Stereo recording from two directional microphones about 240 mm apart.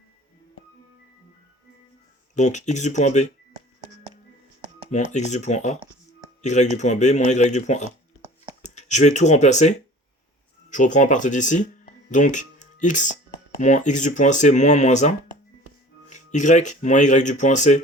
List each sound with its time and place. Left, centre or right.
2.3 s speech: left
4.9 s speech: left